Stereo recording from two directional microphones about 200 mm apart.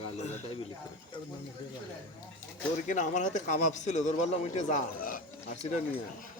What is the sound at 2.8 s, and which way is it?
A man's voice, 40° left (ahead or behind).